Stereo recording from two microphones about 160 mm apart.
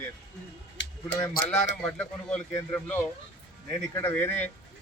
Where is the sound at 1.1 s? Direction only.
20° left (ahead or behind).